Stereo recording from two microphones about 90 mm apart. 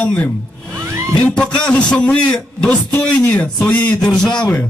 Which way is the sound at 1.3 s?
10° left (ahead or behind).